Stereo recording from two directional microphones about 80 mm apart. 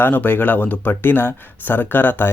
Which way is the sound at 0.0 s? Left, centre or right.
Left.